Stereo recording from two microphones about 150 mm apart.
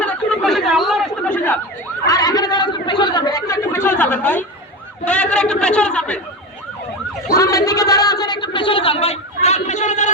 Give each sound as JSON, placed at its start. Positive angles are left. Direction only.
{"t": 0.0, "sound": "chatter", "side_deg": 10}
{"t": 2.0, "sound": "chatter", "side_deg": 25}
{"t": 7.3, "sound": "a sound", "side_deg": 20}